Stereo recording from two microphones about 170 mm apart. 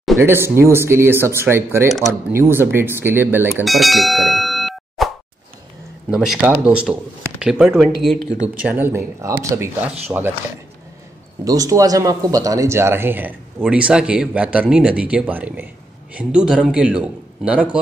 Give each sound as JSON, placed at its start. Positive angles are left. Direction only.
{"t": 0.2, "sound": "speech", "side_deg": -15}
{"t": 1.9, "sound": "speech", "side_deg": 0}
{"t": 2.3, "sound": "speech", "side_deg": -15}
{"t": 3.6, "sound": "plop", "side_deg": 0}
{"t": 6.0, "sound": "speech", "side_deg": -5}
{"t": 11.4, "sound": "speech", "side_deg": -20}